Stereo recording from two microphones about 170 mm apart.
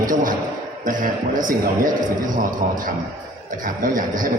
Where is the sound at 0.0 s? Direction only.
55° right (ahead or behind).